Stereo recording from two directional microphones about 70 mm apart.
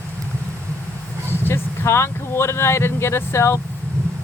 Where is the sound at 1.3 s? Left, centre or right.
Left.